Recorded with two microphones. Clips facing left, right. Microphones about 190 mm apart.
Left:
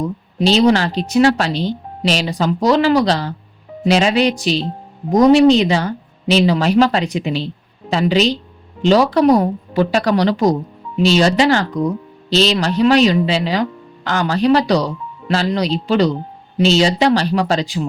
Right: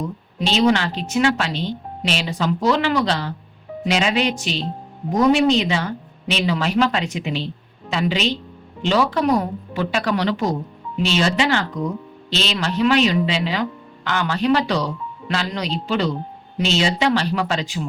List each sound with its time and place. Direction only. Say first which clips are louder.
0.3 s speech: left 5 dB; 35° left (ahead or behind)